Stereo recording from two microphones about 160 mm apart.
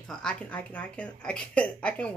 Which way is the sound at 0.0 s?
5° left (ahead or behind).